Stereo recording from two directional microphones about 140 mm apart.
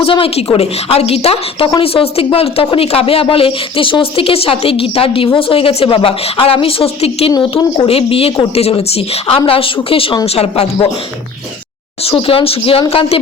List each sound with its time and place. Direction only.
0.0 s speech: 40° left (ahead or behind)
7.3 s speech: 35° left (ahead or behind)
12.0 s speech: 40° left (ahead or behind)